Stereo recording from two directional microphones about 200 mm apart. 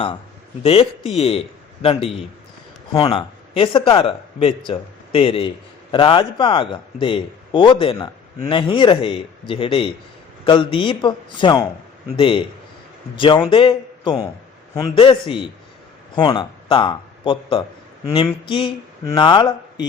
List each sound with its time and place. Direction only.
0.6 s a man's voice: 30° left (ahead or behind)